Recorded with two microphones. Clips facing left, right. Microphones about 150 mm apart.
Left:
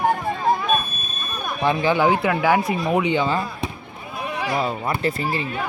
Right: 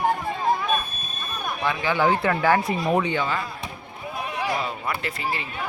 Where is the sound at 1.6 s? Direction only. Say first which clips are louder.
Left 6 dB; 25° left (ahead or behind).